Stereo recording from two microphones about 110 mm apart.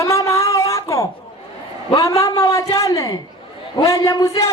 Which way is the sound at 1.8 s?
30° left (ahead or behind).